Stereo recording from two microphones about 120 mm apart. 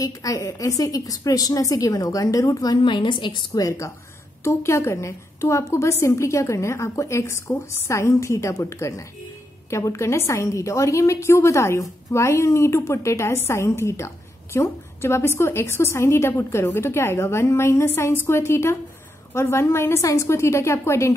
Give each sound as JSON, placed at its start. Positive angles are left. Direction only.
{"t": 0.0, "sound": "a woman's voice", "side_deg": 30}
{"t": 3.6, "sound": "a woman's voice", "side_deg": 25}